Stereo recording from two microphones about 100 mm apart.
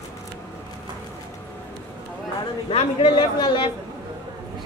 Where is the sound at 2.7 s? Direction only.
75° left (ahead or behind); by 3.7 s 55° left (ahead or behind).